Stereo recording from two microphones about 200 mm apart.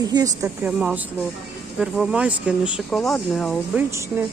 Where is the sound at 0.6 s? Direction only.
5° right (ahead or behind).